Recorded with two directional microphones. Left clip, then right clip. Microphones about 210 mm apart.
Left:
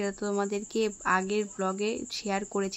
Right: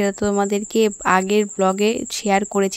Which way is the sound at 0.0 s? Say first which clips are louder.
Right 11 dB; 40° right (ahead or behind).